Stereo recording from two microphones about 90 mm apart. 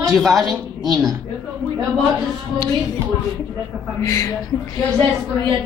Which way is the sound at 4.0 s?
40° left (ahead or behind).